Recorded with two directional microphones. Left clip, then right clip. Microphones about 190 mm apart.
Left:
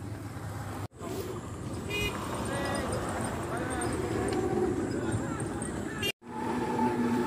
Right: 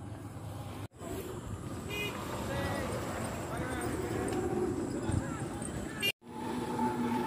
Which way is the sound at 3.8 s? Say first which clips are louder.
Left 4 dB; 55° right (ahead or behind).